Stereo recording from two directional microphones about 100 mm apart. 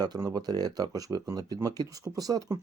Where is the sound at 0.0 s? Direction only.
40° right (ahead or behind).